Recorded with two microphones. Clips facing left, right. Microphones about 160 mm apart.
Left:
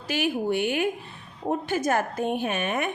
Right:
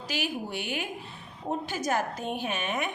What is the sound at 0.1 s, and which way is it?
A woman's voice, 55° left (ahead or behind).